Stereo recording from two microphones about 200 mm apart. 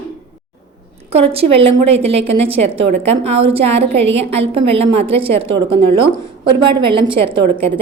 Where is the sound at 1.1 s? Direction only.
30° right (ahead or behind).